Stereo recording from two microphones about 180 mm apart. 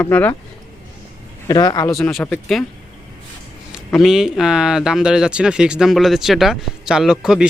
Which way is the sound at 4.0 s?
Centre (ahead or behind).